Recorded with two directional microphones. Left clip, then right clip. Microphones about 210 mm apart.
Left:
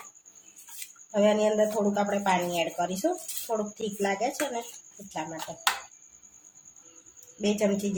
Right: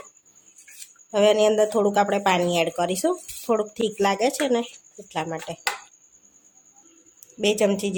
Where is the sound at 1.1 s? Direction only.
50° right (ahead or behind).